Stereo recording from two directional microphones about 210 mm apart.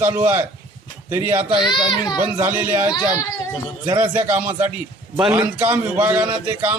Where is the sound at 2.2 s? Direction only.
10° right (ahead or behind).